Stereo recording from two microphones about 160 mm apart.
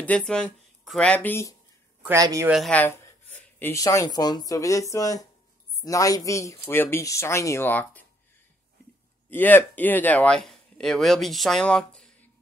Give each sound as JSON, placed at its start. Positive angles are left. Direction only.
{"t": 0.0, "sound": "speech", "side_deg": 5}
{"t": 2.0, "sound": "speech", "side_deg": -20}
{"t": 2.7, "sound": "speech", "side_deg": 10}
{"t": 9.3, "sound": "speech", "side_deg": 10}